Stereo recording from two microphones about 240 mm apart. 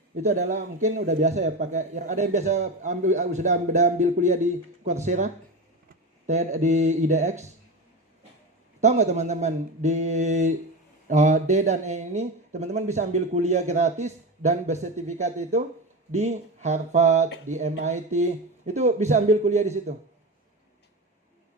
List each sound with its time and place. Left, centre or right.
0.2 s speech: right
8.8 s speech: right